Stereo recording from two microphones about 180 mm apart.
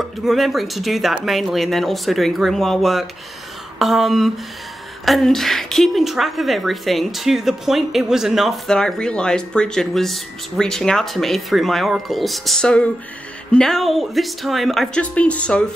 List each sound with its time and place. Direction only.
0.0 s a woman's voice: centre (ahead or behind)